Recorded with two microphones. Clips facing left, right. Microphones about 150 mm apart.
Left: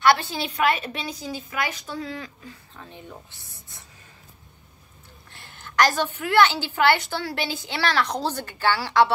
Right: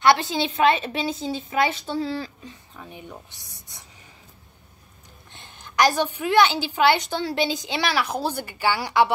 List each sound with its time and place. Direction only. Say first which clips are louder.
0.0 s a woman's voice: right 1 dB; 20° right (ahead or behind)
2.7 s a woman's voice: right 3 dB; 10° right (ahead or behind)
5.3 s a woman's voice: left 2 dB; 20° right (ahead or behind)